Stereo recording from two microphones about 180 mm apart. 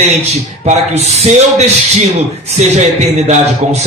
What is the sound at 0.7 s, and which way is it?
Speech, 35° right (ahead or behind).